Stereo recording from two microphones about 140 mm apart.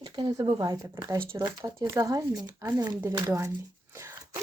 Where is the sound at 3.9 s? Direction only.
20° right (ahead or behind).